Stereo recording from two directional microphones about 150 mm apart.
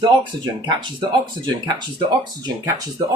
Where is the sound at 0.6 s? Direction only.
30° right (ahead or behind).